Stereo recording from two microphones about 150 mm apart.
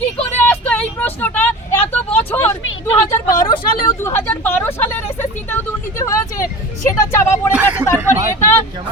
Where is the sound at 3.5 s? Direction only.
25° left (ahead or behind).